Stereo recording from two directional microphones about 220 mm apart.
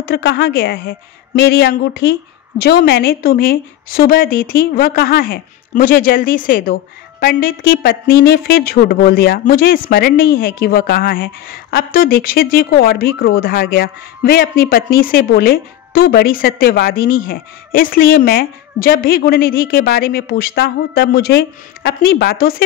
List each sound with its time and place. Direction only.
0.0 s a woman's voice: 50° left (ahead or behind)